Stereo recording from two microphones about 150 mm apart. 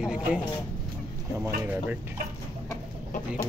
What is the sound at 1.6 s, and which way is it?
Speech, 10° right (ahead or behind).